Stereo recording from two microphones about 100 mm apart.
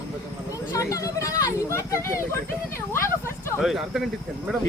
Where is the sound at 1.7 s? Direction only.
30° left (ahead or behind).